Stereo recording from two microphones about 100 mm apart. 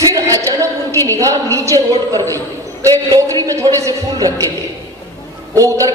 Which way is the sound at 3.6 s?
30° right (ahead or behind).